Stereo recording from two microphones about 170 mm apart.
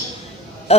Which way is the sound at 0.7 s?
35° left (ahead or behind).